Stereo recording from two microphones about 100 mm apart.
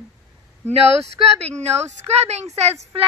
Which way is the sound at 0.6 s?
90° right.